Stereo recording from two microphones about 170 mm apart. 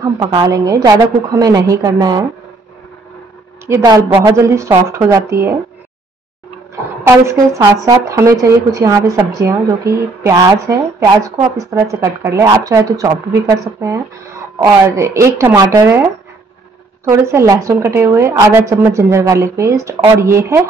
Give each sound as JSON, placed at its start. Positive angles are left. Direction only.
{"t": 0.0, "sound": "speech", "side_deg": -25}
{"t": 3.6, "sound": "speech", "side_deg": -20}
{"t": 6.7, "sound": "speech", "side_deg": -15}
{"t": 17.1, "sound": "speech", "side_deg": -15}